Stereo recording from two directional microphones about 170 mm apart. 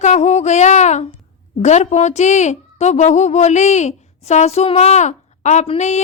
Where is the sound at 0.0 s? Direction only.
40° left (ahead or behind).